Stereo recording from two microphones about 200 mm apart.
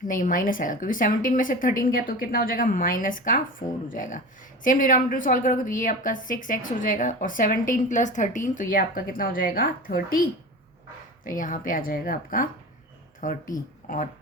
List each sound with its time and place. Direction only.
0.1 s a woman's voice: 40° left (ahead or behind)
11.3 s a woman's voice: 40° left (ahead or behind)